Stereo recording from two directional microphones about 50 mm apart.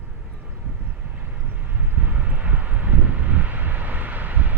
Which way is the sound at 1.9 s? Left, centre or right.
Right.